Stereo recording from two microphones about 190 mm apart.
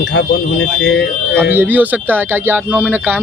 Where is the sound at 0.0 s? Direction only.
65° left (ahead or behind).